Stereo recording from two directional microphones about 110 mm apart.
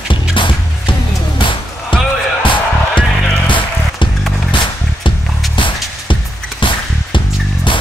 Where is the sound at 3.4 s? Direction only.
50° left (ahead or behind).